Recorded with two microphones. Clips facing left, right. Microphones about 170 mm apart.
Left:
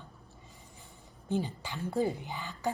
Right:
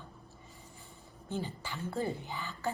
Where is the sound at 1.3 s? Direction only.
15° left (ahead or behind).